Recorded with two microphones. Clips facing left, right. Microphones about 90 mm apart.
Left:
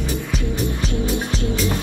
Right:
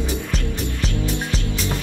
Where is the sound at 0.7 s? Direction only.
20° left (ahead or behind).